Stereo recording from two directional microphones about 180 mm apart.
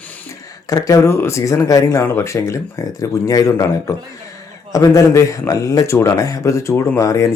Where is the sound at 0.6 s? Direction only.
20° left (ahead or behind).